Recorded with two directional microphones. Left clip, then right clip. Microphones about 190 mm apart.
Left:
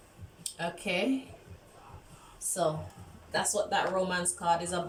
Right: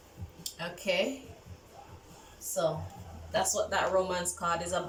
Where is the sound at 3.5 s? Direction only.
15° left (ahead or behind).